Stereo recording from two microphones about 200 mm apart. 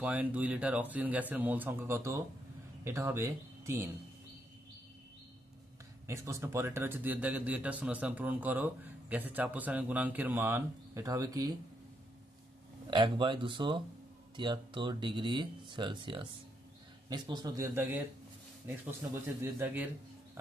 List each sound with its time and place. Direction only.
0.0 s speech: 5° right (ahead or behind)
6.0 s speech: 15° right (ahead or behind)
12.9 s speech: 25° right (ahead or behind)